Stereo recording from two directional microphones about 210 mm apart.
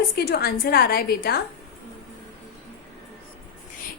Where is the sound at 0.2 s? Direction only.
50° left (ahead or behind).